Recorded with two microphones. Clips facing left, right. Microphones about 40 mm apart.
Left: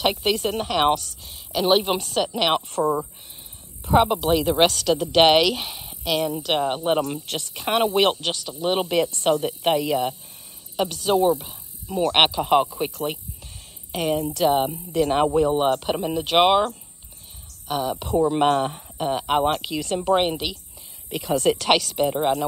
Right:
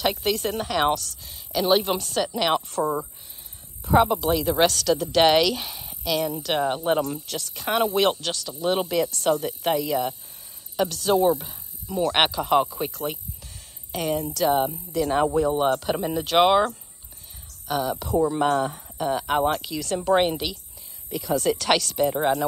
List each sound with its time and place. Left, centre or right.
0.0 s a woman's voice: left
2.3 s speech: left
3.8 s a woman's voice: left
13.9 s a woman's voice: centre
14.3 s speech: left
16.0 s a woman's voice: centre
16.3 s speech: centre
18.3 s speech: left
18.9 s speech: left
21.1 s speech: left
21.6 s a woman's voice: centre